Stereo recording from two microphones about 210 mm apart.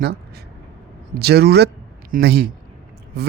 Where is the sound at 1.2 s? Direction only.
50° right (ahead or behind).